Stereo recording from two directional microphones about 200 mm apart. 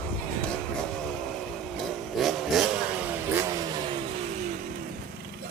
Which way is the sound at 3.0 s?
15° right (ahead or behind).